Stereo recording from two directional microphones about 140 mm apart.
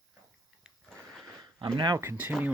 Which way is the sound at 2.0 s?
15° right (ahead or behind).